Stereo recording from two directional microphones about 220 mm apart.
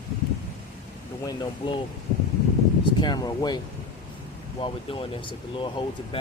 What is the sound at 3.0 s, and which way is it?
Speech, 20° left (ahead or behind).